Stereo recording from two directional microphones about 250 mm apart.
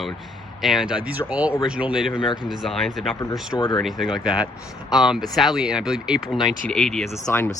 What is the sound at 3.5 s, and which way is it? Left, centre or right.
Speech, centre.